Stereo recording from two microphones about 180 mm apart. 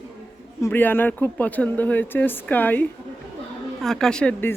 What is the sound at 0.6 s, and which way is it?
Speech, 10° left (ahead or behind).